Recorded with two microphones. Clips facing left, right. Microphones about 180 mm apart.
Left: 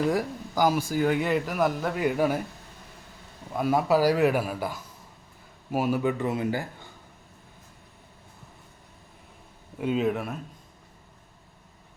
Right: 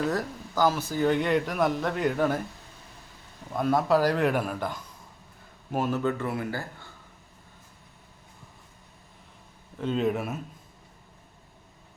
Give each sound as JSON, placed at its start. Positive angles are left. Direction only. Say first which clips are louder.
{"t": 0.0, "sound": "speech", "louder": "left 3 dB", "side_deg": 10}
{"t": 3.5, "sound": "speech", "louder": "even", "side_deg": 10}
{"t": 9.7, "sound": "speech", "louder": "left 1 dB", "side_deg": 10}